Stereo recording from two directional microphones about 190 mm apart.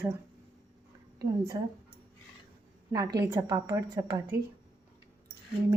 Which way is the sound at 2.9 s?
20° right (ahead or behind).